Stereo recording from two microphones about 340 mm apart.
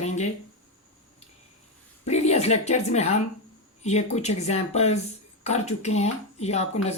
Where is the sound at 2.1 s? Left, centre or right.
Centre.